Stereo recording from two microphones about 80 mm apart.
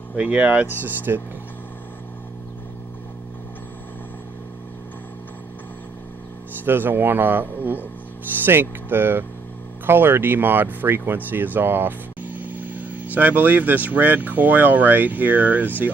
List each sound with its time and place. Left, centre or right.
0.1 s speech: centre
6.6 s speech: right